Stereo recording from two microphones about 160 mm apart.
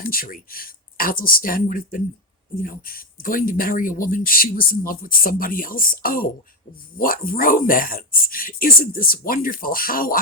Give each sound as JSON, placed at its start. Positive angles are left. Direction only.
{"t": 0.0, "sound": "speech", "side_deg": 60}